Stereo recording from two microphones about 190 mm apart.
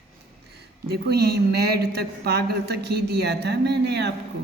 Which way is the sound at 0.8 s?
60° right (ahead or behind).